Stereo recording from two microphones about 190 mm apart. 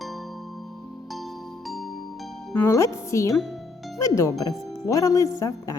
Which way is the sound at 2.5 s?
15° left (ahead or behind).